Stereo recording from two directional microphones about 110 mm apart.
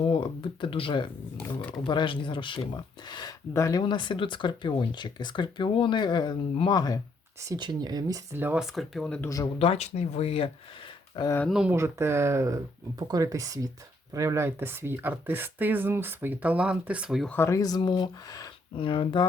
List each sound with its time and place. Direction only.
0.0 s speech: 50° left (ahead or behind)
7.4 s speech: 40° right (ahead or behind)
8.5 s speech: centre (ahead or behind)
9.2 s speech: 30° left (ahead or behind)
9.6 s speech: 75° left (ahead or behind)
11.4 s speech: 5° right (ahead or behind)
11.7 s speech: 25° right (ahead or behind); by 17.2 s 10° right (ahead or behind)
17.2 s speech: 20° left (ahead or behind)
17.6 s speech: 35° left (ahead or behind)
18.8 s speech: 50° left (ahead or behind)